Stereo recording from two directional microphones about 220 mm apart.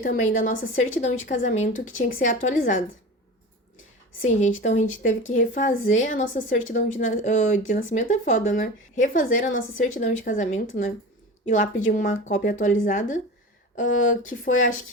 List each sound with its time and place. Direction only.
0.0 s a woman's voice: 35° left (ahead or behind)
4.3 s a woman's voice: 35° left (ahead or behind)